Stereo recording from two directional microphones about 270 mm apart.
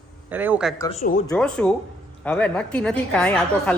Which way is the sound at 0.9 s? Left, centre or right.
Left.